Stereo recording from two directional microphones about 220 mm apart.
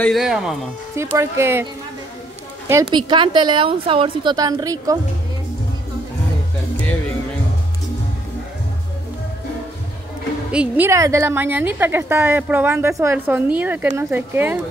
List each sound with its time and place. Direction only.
0.0 s a woman's voice: centre (ahead or behind)
2.7 s a woman's voice: 20° right (ahead or behind)
10.5 s a woman's voice: 5° right (ahead or behind)